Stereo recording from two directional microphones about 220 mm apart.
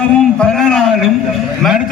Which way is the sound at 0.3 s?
Centre (ahead or behind).